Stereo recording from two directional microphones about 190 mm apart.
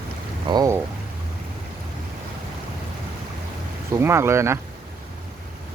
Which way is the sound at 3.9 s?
15° right (ahead or behind).